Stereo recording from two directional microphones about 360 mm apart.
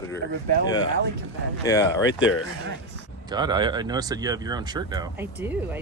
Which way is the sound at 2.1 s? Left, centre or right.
Left.